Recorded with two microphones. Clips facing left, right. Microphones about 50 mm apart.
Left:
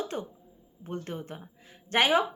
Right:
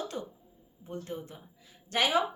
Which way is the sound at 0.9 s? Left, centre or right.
Left.